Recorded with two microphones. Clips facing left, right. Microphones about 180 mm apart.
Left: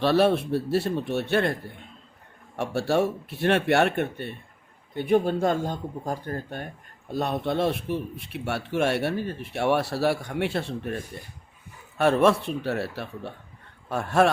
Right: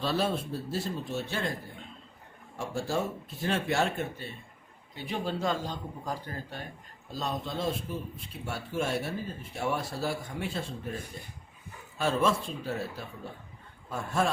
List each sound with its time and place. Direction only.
0.0 s speech: 70° left (ahead or behind)
4.9 s speech: 55° left (ahead or behind); by 14.3 s 70° left (ahead or behind)